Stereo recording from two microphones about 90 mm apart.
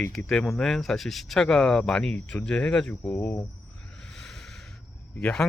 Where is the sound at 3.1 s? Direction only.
20° left (ahead or behind).